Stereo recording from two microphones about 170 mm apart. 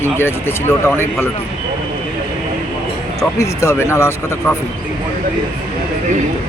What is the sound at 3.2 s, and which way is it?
Speech, 15° left (ahead or behind).